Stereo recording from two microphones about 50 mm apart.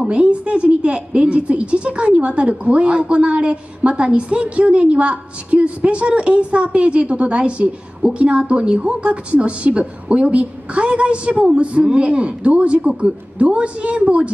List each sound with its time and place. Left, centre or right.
0.0 s a woman's voice: right